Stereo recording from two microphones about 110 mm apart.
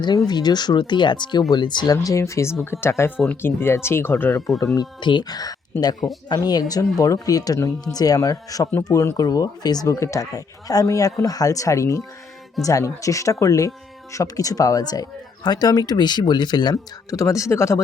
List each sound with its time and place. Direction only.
0.3 s speech: 40° left (ahead or behind); by 4.4 s 20° left (ahead or behind)
4.6 s speech: 35° left (ahead or behind)
16.7 s speech: 30° left (ahead or behind)